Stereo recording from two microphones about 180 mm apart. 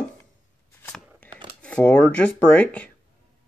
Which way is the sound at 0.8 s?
10° left (ahead or behind).